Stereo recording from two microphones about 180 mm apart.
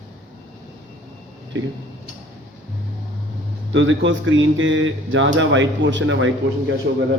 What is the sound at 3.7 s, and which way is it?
Speech, 90° right.